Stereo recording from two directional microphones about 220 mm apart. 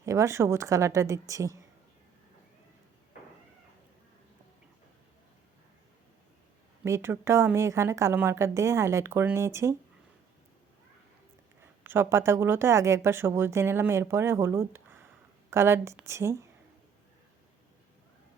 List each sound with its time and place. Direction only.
0.0 s speech: 15° right (ahead or behind)
6.8 s speech: 10° right (ahead or behind)
11.6 s speech: 10° right (ahead or behind)